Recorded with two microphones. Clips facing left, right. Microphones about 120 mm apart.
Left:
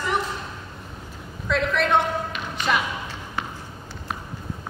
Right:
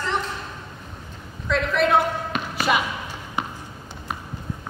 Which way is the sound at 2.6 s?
5° right (ahead or behind).